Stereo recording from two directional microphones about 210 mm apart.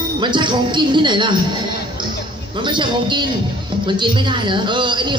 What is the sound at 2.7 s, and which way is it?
Speech, 20° right (ahead or behind).